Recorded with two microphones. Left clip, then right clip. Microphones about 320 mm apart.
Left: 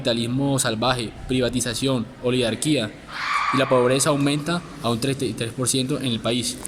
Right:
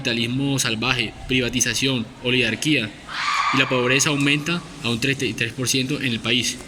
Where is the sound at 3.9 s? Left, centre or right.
Centre.